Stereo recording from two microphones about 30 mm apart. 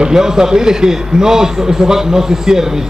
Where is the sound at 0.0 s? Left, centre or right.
Centre.